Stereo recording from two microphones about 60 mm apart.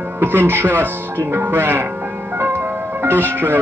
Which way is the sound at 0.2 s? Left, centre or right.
Right.